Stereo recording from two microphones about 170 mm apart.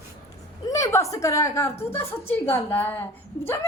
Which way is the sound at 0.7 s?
15° left (ahead or behind).